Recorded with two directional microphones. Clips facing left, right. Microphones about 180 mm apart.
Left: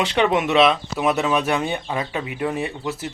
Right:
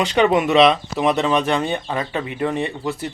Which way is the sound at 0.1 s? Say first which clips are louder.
Right 3 dB; centre (ahead or behind).